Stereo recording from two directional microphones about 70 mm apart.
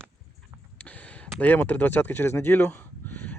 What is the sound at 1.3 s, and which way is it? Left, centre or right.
Speech, left.